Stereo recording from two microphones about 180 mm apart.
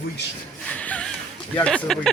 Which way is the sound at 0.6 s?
5° left (ahead or behind).